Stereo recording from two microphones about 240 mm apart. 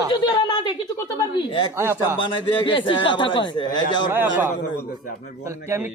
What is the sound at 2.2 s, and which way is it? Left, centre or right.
A man's voice, centre.